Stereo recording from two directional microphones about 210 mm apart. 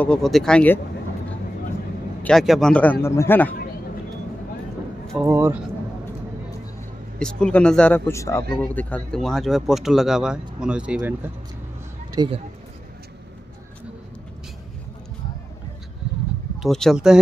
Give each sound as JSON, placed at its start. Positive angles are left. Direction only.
{"t": 0.0, "sound": "speech", "side_deg": 5}
{"t": 2.2, "sound": "a man's voice", "side_deg": 0}
{"t": 5.0, "sound": "a man's voice", "side_deg": -10}
{"t": 7.2, "sound": "speech", "side_deg": 5}
{"t": 12.1, "sound": "speech", "side_deg": -20}
{"t": 16.6, "sound": "speech", "side_deg": 0}